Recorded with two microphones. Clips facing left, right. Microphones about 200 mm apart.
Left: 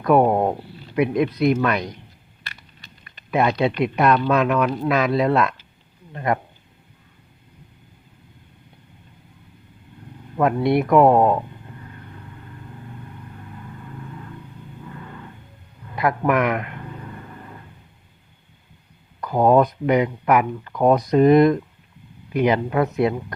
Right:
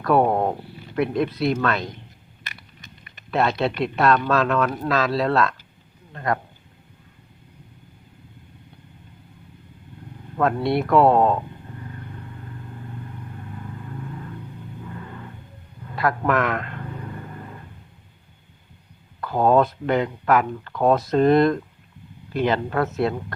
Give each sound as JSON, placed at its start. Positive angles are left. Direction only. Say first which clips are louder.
{"t": 0.0, "sound": "speech", "louder": "left 2 dB", "side_deg": 15}
{"t": 3.6, "sound": "speech", "louder": "left 2 dB", "side_deg": 15}
{"t": 10.3, "sound": "speech", "louder": "left 3 dB", "side_deg": 15}
{"t": 16.0, "sound": "speech", "louder": "left 2 dB", "side_deg": 20}
{"t": 19.2, "sound": "speech", "louder": "left 2 dB", "side_deg": 15}